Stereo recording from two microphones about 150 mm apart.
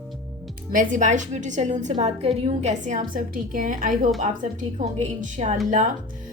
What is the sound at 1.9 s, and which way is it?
A woman's voice, 40° right (ahead or behind).